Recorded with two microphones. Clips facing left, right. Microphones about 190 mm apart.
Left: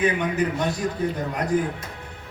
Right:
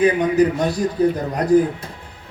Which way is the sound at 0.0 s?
35° right (ahead or behind).